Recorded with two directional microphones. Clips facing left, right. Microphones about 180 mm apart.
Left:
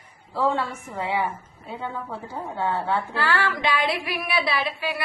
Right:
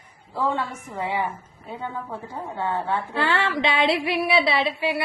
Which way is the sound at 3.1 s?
20° right (ahead or behind).